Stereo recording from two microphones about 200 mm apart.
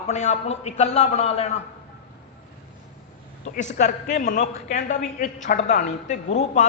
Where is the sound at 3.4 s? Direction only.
35° left (ahead or behind).